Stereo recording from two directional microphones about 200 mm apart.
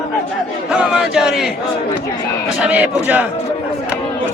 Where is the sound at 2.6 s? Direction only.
5° right (ahead or behind).